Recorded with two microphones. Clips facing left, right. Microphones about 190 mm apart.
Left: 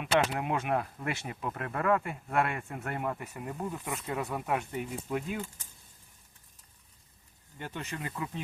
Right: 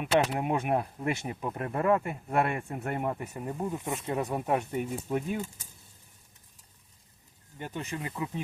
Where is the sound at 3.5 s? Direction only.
20° right (ahead or behind).